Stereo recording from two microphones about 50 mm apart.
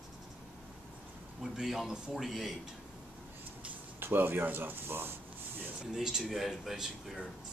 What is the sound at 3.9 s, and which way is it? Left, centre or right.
Speech, right.